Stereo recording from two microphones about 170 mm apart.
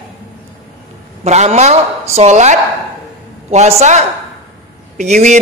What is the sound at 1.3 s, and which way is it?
A man's voice, 40° right (ahead or behind).